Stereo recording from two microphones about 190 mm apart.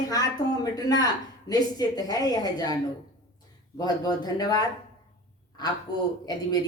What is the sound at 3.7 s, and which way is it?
A woman's voice, 20° left (ahead or behind).